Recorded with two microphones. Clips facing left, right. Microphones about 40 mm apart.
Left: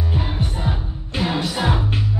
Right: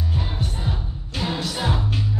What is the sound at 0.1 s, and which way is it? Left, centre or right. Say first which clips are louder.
Music: left 3 dB; left.